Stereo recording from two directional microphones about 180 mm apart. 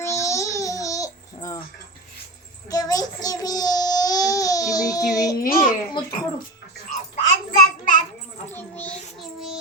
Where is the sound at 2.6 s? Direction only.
20° left (ahead or behind).